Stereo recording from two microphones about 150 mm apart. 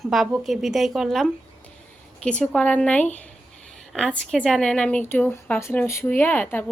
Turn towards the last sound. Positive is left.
turn(degrees=10)  # may be behind; listen again after turning